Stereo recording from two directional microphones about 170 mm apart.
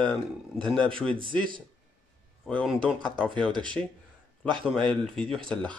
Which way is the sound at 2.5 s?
5° left (ahead or behind).